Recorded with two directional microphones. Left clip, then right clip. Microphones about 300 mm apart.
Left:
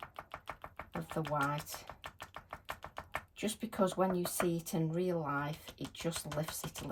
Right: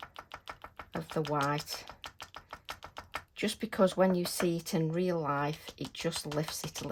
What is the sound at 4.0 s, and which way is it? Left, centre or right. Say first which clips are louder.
Speech: right 5 dB; right.